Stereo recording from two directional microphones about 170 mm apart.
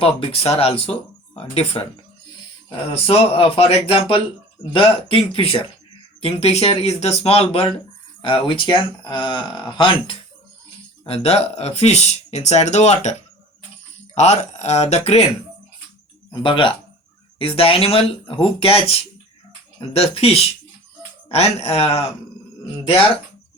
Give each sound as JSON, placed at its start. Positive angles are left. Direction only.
{"t": 0.3, "sound": "speech", "side_deg": 35}
{"t": 2.9, "sound": "speech", "side_deg": 35}
{"t": 14.2, "sound": "speech", "side_deg": 40}
{"t": 16.3, "sound": "speech", "side_deg": 30}